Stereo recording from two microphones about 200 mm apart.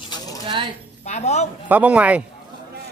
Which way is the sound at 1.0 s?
35° left (ahead or behind).